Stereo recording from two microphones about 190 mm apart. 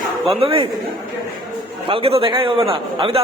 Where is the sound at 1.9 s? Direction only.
30° right (ahead or behind).